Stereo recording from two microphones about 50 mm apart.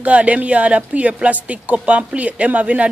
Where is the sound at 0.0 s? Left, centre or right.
Right.